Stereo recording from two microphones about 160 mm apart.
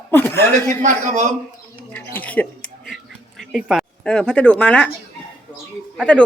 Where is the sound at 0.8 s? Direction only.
50° right (ahead or behind).